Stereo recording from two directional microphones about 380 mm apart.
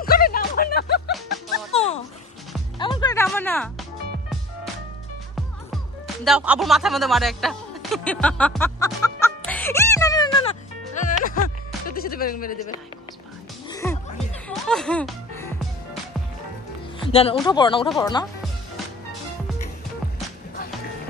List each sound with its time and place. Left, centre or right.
0.0 s music: left
1.7 s a sound: centre
2.8 s music: centre
6.2 s speech: centre
11.1 s music: left
11.9 s speech: left
13.7 s music: centre
17.0 s speech: centre